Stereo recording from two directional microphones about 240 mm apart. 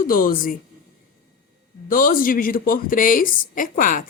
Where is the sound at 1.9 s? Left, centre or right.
Left.